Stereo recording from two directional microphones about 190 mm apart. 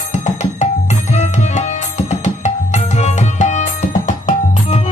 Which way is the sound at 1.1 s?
40° left (ahead or behind).